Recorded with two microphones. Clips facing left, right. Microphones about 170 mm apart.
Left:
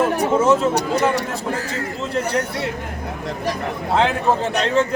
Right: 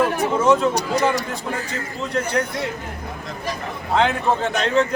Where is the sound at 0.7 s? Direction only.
65° left (ahead or behind).